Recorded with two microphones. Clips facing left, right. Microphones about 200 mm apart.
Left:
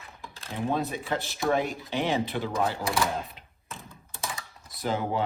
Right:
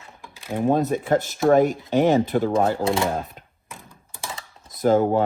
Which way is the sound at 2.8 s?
25° right (ahead or behind).